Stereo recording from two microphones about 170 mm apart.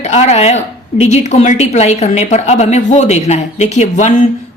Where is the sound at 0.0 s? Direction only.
40° left (ahead or behind).